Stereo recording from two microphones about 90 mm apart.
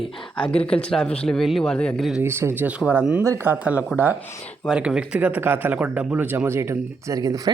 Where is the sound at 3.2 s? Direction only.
30° right (ahead or behind).